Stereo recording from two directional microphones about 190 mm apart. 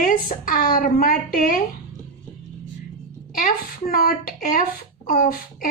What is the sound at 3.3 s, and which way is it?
A woman's voice, 50° left (ahead or behind).